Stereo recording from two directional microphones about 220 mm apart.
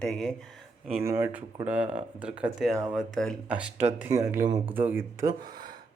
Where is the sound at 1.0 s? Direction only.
10° right (ahead or behind).